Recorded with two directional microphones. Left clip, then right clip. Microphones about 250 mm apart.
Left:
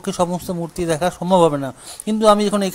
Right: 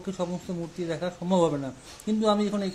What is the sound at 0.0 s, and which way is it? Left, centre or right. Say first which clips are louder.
Speech: left 12 dB; left.